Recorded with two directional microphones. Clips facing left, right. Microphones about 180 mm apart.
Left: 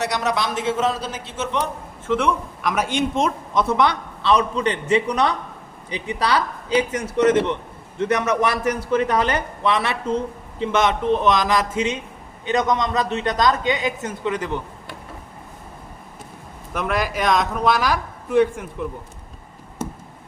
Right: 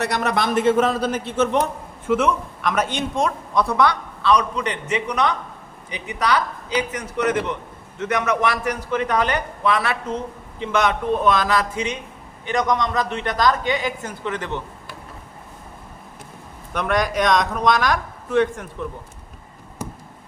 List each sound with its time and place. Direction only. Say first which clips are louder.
0.0 s a man's voice: right 1 dB; 55° right (ahead or behind)
2.0 s speech: right 1 dB; centre (ahead or behind)
3.2 s a man's voice: even; 20° left (ahead or behind)
16.7 s speech: right 2 dB; 5° left (ahead or behind)